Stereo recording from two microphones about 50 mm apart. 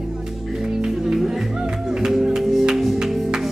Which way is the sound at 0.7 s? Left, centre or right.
Centre.